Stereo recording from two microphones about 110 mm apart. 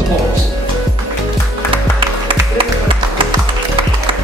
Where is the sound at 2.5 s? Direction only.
55° right (ahead or behind).